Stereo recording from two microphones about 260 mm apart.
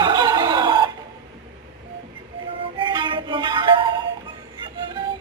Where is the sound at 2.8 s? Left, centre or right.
Centre.